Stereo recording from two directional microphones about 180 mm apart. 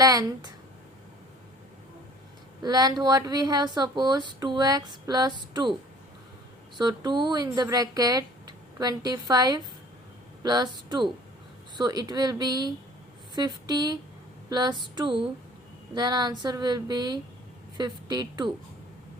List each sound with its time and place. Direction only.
0.0 s speech: 20° right (ahead or behind)
2.6 s speech: 20° right (ahead or behind)
6.7 s a woman's voice: 25° right (ahead or behind)